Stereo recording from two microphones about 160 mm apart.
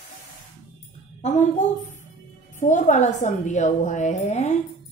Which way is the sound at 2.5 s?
50° left (ahead or behind).